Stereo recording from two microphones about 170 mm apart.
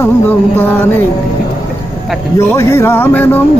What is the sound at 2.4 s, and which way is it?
Music, 15° left (ahead or behind).